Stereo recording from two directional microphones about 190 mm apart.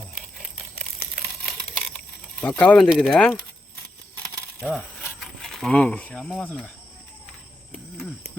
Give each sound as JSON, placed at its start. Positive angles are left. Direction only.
{"t": 1.1, "sound": "crumpling", "side_deg": 0}
{"t": 2.4, "sound": "speech", "side_deg": 5}
{"t": 4.6, "sound": "speech", "side_deg": 0}